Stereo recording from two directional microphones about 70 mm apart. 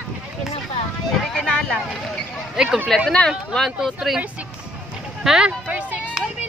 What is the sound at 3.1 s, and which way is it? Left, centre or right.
Speech, centre.